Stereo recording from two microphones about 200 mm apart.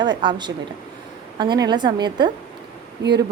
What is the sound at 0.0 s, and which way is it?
A woman's voice, 20° right (ahead or behind).